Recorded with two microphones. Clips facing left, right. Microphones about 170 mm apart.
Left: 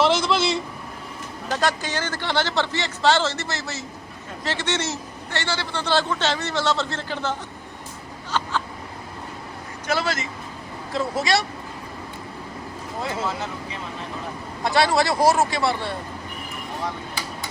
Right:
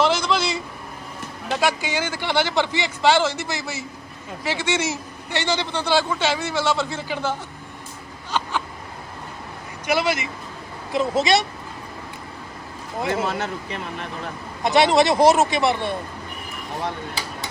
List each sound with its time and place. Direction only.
0.0 s a sound: centre (ahead or behind)
1.5 s a man's voice: 10° right (ahead or behind)
8.3 s a sound: 15° right (ahead or behind)
9.8 s a man's voice: 15° right (ahead or behind)
13.1 s speech: 65° right (ahead or behind)
14.6 s speech: 20° right (ahead or behind)